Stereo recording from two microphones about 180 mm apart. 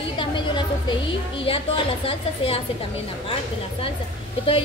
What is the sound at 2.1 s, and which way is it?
Speech, 30° left (ahead or behind).